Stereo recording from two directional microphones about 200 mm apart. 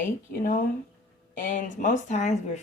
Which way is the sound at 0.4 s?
40° left (ahead or behind).